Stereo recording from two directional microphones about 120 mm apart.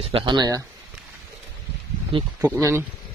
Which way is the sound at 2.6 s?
25° right (ahead or behind).